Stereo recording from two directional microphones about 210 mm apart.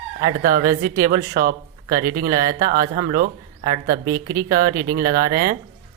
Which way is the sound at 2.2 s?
45° right (ahead or behind).